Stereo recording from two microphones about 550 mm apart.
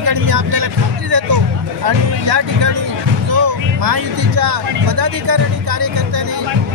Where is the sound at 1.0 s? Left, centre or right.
Right.